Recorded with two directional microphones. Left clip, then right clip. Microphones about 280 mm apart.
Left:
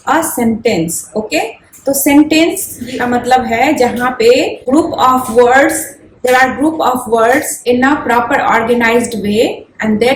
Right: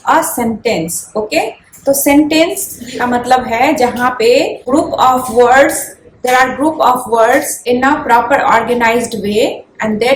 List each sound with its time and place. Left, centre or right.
0.0 s a woman's voice: centre